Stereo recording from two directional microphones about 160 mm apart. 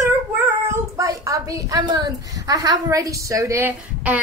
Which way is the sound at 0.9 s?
20° right (ahead or behind).